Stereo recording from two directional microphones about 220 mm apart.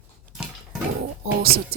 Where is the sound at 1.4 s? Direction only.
45° right (ahead or behind).